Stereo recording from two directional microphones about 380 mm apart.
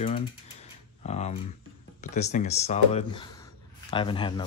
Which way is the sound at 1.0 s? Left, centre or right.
Centre.